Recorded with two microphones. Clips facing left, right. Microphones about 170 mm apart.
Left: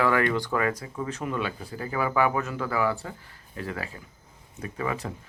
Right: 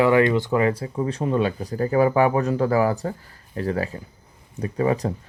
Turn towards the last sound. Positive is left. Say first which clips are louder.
# right 9 dB
turn(degrees=-35)  # may be behind; listen again after turning